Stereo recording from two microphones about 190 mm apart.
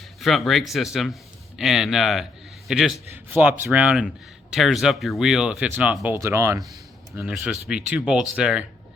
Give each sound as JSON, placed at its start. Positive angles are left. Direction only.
{"t": 0.2, "sound": "speech", "side_deg": 0}
{"t": 7.2, "sound": "speech", "side_deg": -5}